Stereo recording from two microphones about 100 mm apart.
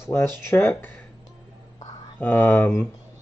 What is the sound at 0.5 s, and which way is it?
Speech, 20° left (ahead or behind).